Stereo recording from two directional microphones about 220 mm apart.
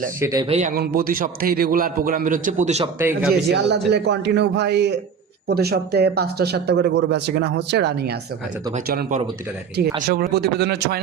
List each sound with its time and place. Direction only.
0.2 s speech: 15° right (ahead or behind)
0.4 s a man's voice: 30° right (ahead or behind)
3.0 s speech: 10° right (ahead or behind)
3.5 s a man's voice: 50° right (ahead or behind)